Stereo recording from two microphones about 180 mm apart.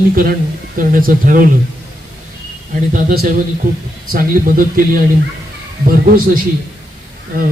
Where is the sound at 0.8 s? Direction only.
50° right (ahead or behind).